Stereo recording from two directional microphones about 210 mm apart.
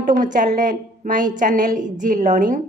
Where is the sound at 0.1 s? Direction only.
40° right (ahead or behind).